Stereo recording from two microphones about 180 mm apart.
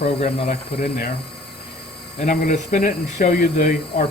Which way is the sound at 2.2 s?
45° left (ahead or behind).